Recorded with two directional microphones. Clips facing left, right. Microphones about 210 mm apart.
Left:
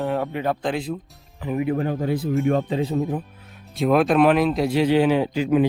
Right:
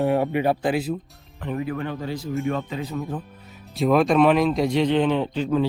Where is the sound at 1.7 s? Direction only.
40° left (ahead or behind).